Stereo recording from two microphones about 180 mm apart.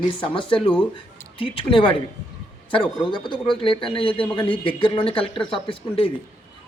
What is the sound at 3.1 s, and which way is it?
Speech, 25° left (ahead or behind).